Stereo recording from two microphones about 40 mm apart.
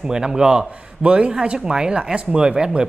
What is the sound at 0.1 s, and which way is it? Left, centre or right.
Speech, centre.